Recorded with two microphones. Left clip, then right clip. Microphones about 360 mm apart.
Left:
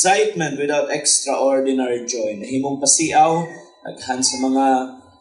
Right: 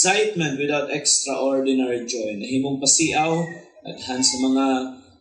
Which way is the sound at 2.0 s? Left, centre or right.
Centre.